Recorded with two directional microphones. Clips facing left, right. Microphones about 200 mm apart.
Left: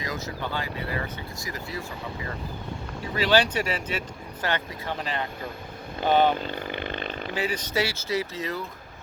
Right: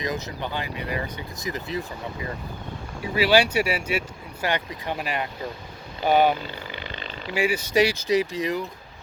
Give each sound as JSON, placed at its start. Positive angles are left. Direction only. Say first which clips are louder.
{"t": 0.0, "sound": "speech", "louder": "right 3 dB", "side_deg": -20}
{"t": 3.2, "sound": "speech", "louder": "right 3 dB", "side_deg": -10}
{"t": 6.4, "sound": "vehicle", "louder": "left 4 dB", "side_deg": 50}
{"t": 7.3, "sound": "speech", "louder": "right 7 dB", "side_deg": -10}